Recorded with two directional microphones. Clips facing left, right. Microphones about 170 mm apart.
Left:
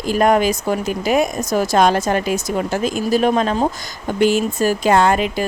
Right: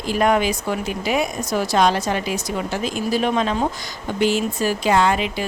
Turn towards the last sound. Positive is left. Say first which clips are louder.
# left 3 dB
turn(degrees=45)  # may be behind; listen again after turning